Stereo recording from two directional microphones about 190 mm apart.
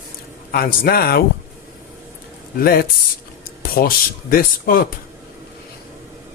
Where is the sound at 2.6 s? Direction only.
50° left (ahead or behind).